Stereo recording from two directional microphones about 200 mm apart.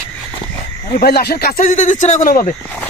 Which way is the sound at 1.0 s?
50° left (ahead or behind).